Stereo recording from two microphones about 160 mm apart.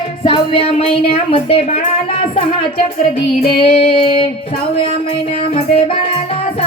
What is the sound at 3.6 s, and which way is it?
Female singing, 35° left (ahead or behind).